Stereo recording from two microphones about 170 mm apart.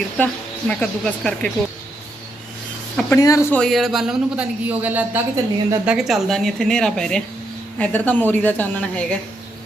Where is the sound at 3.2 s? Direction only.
20° left (ahead or behind).